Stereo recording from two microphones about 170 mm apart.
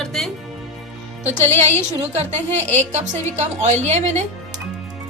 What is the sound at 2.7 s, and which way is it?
A woman's voice, 40° right (ahead or behind).